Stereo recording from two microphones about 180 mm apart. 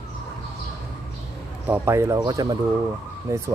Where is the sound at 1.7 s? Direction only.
15° right (ahead or behind).